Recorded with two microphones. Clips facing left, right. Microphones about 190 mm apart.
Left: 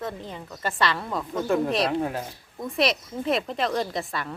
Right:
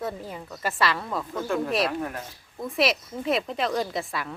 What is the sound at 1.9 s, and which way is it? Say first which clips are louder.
Speech: left 4 dB; 30° left (ahead or behind).